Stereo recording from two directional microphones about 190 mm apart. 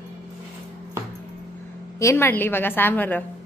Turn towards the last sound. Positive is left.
turn(degrees=10)  # may be behind; listen again after turning